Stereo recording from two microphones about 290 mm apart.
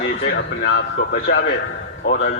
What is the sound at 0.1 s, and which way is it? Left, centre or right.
A man's voice, left.